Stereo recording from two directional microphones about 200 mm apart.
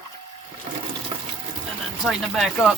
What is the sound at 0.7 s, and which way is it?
Water, 30° right (ahead or behind).